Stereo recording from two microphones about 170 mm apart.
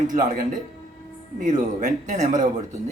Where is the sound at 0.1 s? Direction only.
50° right (ahead or behind).